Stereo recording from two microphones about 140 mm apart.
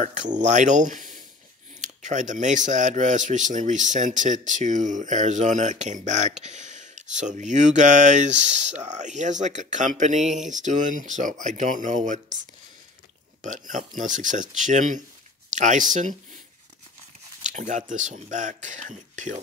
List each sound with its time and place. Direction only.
0.0 s a man's voice: 60° right (ahead or behind)
13.4 s a man's voice: 65° right (ahead or behind)
17.5 s a man's voice: 60° right (ahead or behind)